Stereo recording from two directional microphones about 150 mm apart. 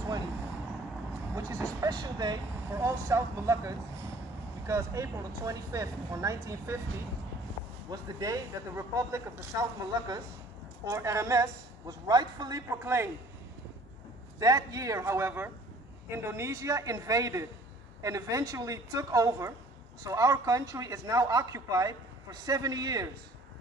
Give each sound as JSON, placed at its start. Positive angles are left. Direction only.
{"t": 1.8, "sound": "speech", "side_deg": -25}
{"t": 7.9, "sound": "speech", "side_deg": -25}
{"t": 14.4, "sound": "speech", "side_deg": -20}